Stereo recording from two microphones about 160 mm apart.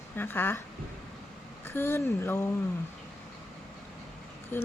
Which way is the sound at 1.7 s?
15° left (ahead or behind).